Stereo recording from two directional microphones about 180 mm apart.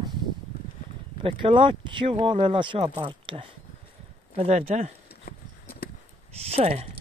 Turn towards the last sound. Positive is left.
turn(degrees=-35)  # may be behind; listen again after turning